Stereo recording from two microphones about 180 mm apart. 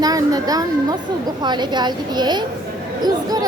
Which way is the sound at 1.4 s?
25° right (ahead or behind).